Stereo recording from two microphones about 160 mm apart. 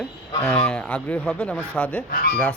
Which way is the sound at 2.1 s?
65° left (ahead or behind).